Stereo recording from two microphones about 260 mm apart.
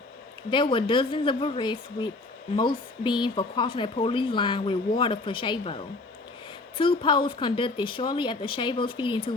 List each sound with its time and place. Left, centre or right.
0.5 s speech: centre